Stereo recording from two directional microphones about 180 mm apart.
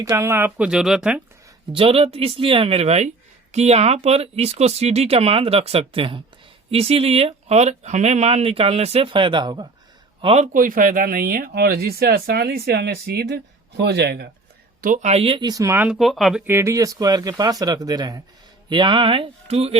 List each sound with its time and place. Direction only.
0.0 s speech: 15° right (ahead or behind)
1.7 s speech: 30° right (ahead or behind); by 14.3 s 65° right (ahead or behind)
14.8 s speech: 45° right (ahead or behind); by 16.4 s centre (ahead or behind)
16.5 s speech: 15° right (ahead or behind); by 19.7 s 35° right (ahead or behind)